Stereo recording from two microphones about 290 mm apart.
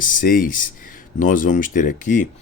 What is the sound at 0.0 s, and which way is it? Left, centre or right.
Speech, left.